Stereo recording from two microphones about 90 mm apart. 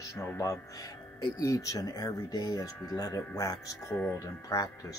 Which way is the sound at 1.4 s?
40° left (ahead or behind).